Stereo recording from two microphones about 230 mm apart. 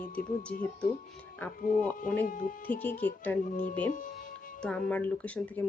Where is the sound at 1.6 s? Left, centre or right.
Left.